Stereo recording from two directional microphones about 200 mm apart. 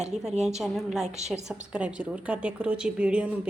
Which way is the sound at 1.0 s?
35° right (ahead or behind).